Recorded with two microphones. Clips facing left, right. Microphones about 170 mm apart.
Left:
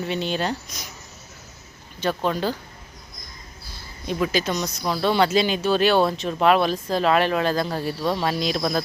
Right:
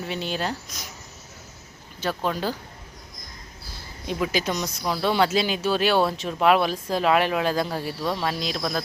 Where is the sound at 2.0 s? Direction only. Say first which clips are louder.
Left 3 dB; 5° right (ahead or behind).